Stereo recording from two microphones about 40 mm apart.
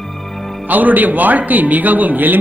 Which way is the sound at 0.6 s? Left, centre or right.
Right.